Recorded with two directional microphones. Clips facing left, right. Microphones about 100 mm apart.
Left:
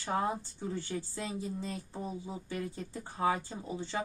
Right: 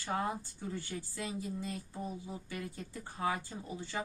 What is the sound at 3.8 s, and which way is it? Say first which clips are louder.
Speech: left 3 dB; 25° left (ahead or behind).